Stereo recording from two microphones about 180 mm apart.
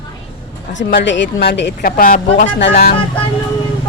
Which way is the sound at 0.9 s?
75° left (ahead or behind).